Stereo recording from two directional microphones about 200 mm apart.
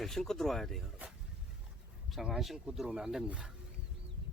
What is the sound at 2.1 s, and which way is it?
Speech, centre (ahead or behind).